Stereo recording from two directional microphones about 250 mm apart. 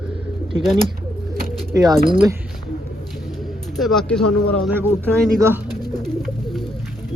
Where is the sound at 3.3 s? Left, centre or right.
Centre.